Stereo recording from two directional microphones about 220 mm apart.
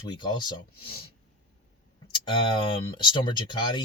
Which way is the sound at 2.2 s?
20° left (ahead or behind).